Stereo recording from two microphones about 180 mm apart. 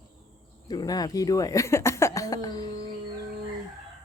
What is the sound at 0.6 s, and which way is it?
Speech, 20° left (ahead or behind).